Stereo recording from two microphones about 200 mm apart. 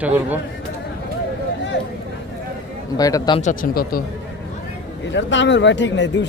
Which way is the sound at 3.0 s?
15° left (ahead or behind).